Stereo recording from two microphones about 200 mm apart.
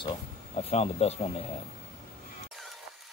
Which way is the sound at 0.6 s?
30° left (ahead or behind).